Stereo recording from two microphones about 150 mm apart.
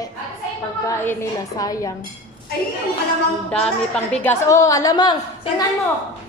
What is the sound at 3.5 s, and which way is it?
A woman's voice, 5° left (ahead or behind).